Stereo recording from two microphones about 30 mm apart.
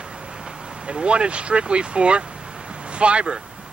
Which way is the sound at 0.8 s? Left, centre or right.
Right.